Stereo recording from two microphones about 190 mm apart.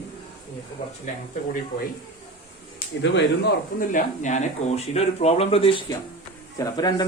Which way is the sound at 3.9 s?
40° left (ahead or behind).